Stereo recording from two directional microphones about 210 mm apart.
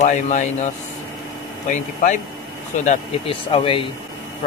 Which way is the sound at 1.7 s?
35° left (ahead or behind).